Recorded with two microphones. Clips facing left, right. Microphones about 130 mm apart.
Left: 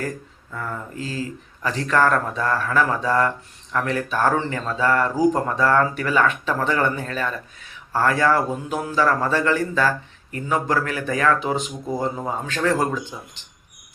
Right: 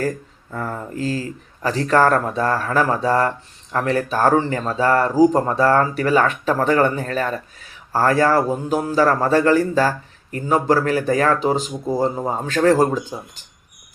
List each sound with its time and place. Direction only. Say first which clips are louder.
0.5 s speech: right 4 dB; 40° right (ahead or behind)